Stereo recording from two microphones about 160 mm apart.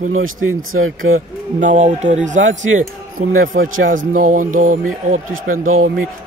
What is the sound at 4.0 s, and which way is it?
Speech, 55° right (ahead or behind).